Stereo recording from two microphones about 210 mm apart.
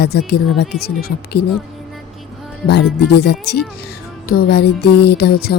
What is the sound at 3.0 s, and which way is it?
Speech, 50° left (ahead or behind).